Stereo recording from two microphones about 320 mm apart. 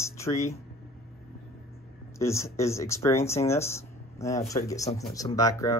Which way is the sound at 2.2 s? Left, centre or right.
Centre.